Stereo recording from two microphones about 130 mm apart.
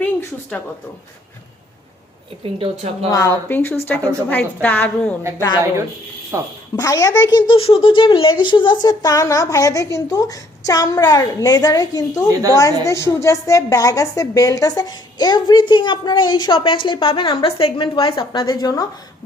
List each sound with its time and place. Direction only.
0.0 s speech: 10° left (ahead or behind)
2.4 s a woman's voice: 50° right (ahead or behind)
3.1 s a woman's voice: 25° left (ahead or behind)
6.3 s a woman's voice: 25° right (ahead or behind)
6.7 s speech: 25° left (ahead or behind)
7.3 s a woman's voice: 40° left (ahead or behind)
12.3 s a woman's voice: 25° right (ahead or behind)
12.5 s a woman's voice: 25° left (ahead or behind); by 18.2 s 45° left (ahead or behind)
18.2 s a woman's voice: 30° left (ahead or behind)